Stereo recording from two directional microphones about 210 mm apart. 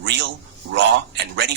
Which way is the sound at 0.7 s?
55° right (ahead or behind).